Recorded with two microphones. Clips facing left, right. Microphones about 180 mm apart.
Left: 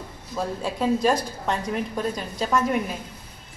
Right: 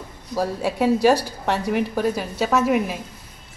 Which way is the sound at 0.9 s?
70° right (ahead or behind).